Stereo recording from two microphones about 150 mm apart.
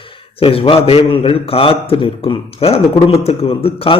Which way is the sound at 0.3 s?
40° left (ahead or behind).